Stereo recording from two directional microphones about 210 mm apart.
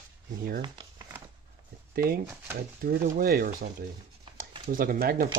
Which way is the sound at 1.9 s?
45° right (ahead or behind).